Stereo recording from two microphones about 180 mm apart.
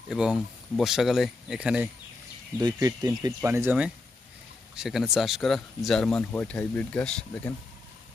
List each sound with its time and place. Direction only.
0.1 s speech: 5° right (ahead or behind)
2.6 s speech: 20° right (ahead or behind); by 7.5 s 5° left (ahead or behind)